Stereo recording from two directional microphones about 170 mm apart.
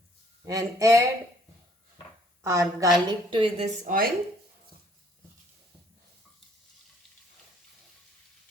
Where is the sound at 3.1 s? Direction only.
30° right (ahead or behind).